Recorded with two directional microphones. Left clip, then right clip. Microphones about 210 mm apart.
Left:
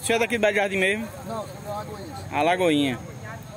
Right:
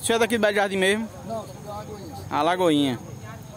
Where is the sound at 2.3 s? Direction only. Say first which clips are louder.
Even; 30° right (ahead or behind).